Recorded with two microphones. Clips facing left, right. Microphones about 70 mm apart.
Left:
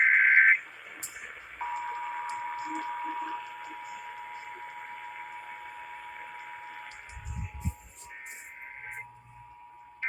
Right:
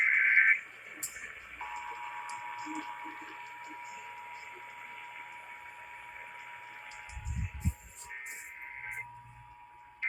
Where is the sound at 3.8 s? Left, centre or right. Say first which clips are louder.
Left 4 dB; left.